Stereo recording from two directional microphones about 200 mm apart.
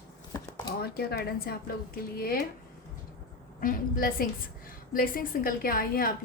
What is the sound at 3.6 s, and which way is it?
A woman's voice, 45° left (ahead or behind).